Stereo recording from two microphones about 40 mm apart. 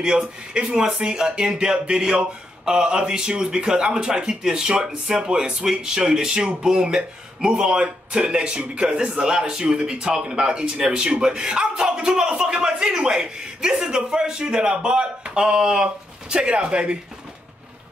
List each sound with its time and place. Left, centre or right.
0.0 s speech: right